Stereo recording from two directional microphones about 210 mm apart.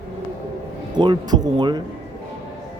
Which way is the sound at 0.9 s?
20° right (ahead or behind).